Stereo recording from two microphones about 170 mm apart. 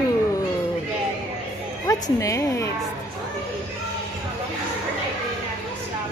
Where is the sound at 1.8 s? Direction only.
20° left (ahead or behind).